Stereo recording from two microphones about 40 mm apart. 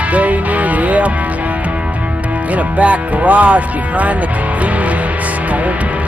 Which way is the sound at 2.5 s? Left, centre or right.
Right.